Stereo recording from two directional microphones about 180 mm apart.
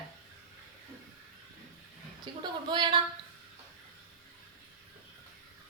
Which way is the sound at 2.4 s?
25° right (ahead or behind).